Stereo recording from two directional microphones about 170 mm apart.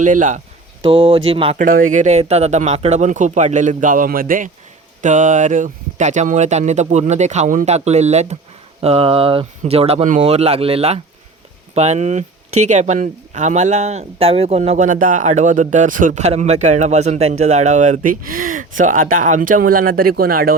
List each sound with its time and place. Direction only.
0.0 s speech: 50° right (ahead or behind)
0.8 s speech: 35° right (ahead or behind)
1.5 s speech: 55° right (ahead or behind)